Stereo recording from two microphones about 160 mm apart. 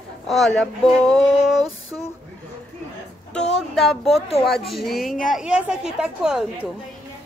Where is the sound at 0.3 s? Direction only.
Centre (ahead or behind).